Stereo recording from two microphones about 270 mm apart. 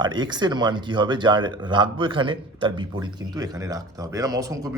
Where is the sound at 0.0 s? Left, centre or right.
Centre.